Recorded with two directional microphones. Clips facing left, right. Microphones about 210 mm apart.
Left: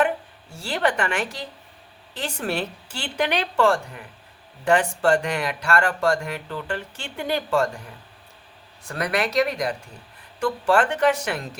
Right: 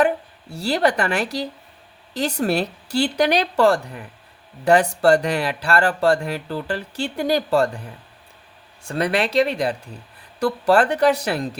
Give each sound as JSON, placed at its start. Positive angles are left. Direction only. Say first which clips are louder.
{"t": 0.5, "sound": "speech", "louder": "right 4 dB", "side_deg": -35}
{"t": 8.8, "sound": "speech", "louder": "right 4 dB", "side_deg": -30}